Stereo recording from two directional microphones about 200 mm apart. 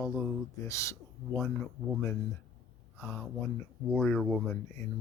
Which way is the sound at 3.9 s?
5° left (ahead or behind).